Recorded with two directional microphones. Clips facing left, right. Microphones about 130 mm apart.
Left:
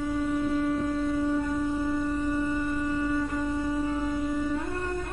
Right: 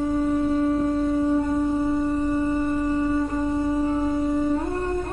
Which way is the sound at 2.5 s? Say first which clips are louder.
Right 5 dB; 40° right (ahead or behind).